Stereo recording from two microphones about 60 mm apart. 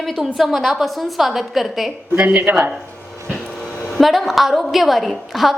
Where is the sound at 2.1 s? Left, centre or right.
Right.